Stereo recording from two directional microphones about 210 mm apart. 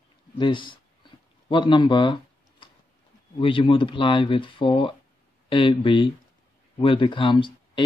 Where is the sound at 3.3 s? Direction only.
25° left (ahead or behind).